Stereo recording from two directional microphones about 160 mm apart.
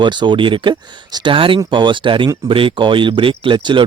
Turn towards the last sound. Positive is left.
turn(degrees=-30)  # may be behind; listen again after turning